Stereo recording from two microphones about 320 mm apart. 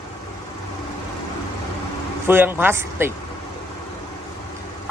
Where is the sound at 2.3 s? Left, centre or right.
Centre.